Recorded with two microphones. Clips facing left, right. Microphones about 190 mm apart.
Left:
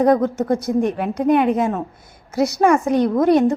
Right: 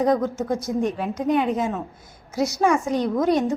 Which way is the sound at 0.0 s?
60° left (ahead or behind).